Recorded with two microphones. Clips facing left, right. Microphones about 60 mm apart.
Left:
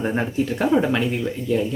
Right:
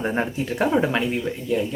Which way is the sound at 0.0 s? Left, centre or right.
Centre.